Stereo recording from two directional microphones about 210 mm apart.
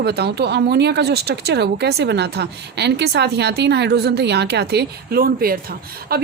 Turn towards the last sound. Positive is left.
turn(degrees=-45)  # may be behind; listen again after turning